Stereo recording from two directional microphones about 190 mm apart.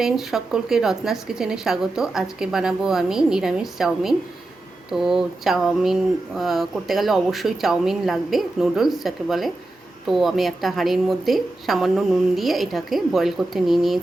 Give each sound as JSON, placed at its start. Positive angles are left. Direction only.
{"t": 0.0, "sound": "speech", "side_deg": 0}